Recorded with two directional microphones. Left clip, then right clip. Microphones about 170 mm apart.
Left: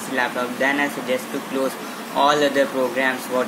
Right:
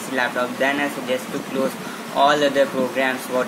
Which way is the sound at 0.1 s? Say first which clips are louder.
Right 1 dB; centre (ahead or behind).